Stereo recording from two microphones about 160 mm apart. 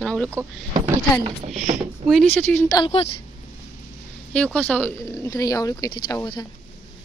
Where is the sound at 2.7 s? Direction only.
35° left (ahead or behind).